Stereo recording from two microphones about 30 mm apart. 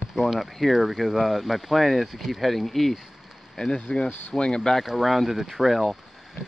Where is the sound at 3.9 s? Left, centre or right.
Left.